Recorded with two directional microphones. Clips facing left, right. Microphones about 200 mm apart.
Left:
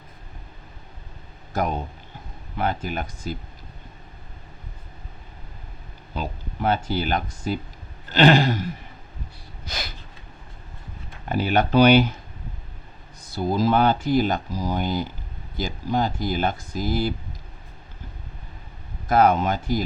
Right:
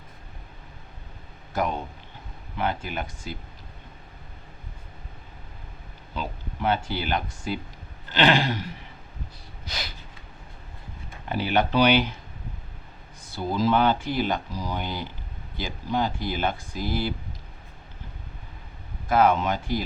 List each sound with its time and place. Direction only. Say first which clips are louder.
2.6 s speech: left 2 dB; 45° left (ahead or behind)
6.1 s speech: left 2 dB; 45° left (ahead or behind)
9.6 s snort: left 2 dB; 45° left (ahead or behind)
11.3 s speech: left 3 dB; 45° left (ahead or behind)
13.3 s speech: left 2 dB; 40° left (ahead or behind)
19.0 s speech: left 2 dB; 40° left (ahead or behind)